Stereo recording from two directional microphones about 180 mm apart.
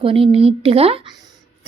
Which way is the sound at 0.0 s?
30° right (ahead or behind).